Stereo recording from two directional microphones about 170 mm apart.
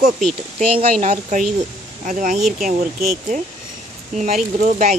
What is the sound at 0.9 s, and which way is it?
Speech, 50° right (ahead or behind).